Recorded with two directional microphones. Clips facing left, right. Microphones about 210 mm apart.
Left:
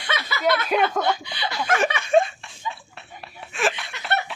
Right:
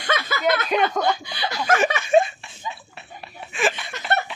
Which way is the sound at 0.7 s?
5° left (ahead or behind).